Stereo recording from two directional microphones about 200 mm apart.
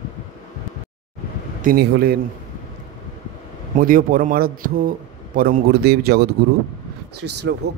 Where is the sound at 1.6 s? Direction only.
50° right (ahead or behind).